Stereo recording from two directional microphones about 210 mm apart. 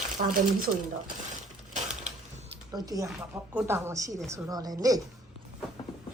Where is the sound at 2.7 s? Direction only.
15° right (ahead or behind).